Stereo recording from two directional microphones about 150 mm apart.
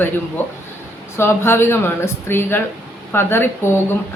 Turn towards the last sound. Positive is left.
turn(degrees=15)  # may be behind; listen again after turning